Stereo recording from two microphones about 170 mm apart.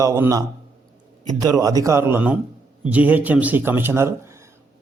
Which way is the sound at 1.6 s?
20° right (ahead or behind).